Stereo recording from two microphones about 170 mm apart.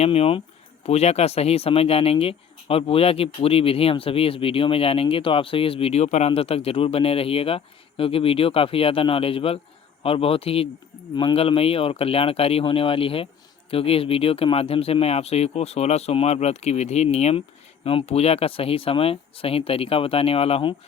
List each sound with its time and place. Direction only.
0.0 s speech: 35° left (ahead or behind)